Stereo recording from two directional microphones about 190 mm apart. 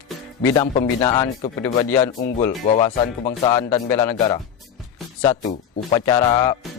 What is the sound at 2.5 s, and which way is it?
Speech, 35° left (ahead or behind).